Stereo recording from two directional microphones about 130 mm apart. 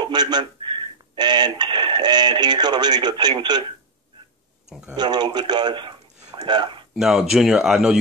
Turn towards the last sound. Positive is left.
turn(degrees=-5)  # may be behind; listen again after turning